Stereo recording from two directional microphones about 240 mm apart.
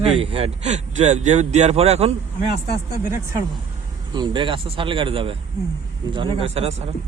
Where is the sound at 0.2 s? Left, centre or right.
Right.